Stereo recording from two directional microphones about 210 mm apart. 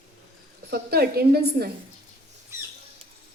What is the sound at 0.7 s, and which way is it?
A woman's voice, 45° right (ahead or behind).